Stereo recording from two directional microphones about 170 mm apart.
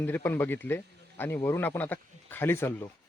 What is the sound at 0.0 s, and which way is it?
Speech, 10° left (ahead or behind).